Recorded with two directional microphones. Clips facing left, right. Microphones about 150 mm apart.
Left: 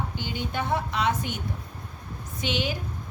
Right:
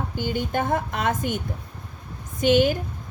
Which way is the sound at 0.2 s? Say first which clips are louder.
Right 8 dB; 45° right (ahead or behind).